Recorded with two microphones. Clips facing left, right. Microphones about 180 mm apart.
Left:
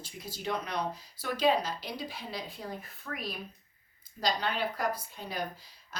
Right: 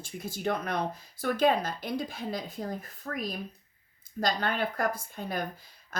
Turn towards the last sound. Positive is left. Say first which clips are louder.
# right 3 dB
turn(degrees=-50)  # may be behind; listen again after turning